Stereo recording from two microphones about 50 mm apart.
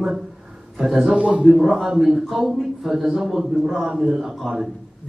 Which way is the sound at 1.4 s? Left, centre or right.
Centre.